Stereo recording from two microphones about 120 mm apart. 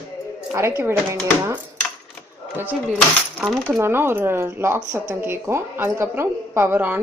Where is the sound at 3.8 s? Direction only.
20° right (ahead or behind).